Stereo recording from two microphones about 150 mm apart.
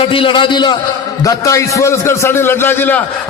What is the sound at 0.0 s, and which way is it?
A man's voice, 35° left (ahead or behind).